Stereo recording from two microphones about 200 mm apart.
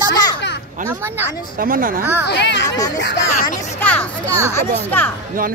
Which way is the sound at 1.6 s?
45° right (ahead or behind).